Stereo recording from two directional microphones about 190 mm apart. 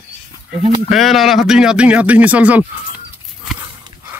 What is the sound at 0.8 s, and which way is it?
Speech, centre (ahead or behind).